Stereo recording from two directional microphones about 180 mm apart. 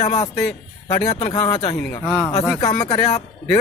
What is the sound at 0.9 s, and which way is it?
Speech, 35° left (ahead or behind).